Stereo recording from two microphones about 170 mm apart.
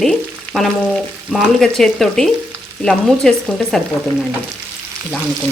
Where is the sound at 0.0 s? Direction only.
Centre (ahead or behind).